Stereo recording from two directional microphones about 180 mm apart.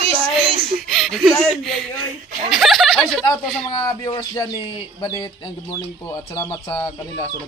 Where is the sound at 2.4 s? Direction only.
Centre (ahead or behind).